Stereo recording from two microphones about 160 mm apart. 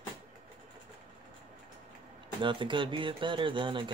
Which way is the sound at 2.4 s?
30° right (ahead or behind).